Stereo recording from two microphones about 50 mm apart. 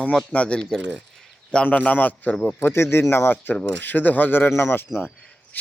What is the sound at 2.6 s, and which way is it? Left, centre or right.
Speech, left.